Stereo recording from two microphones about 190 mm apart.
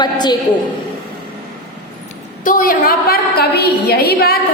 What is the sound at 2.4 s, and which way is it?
A woman's voice, 45° left (ahead or behind).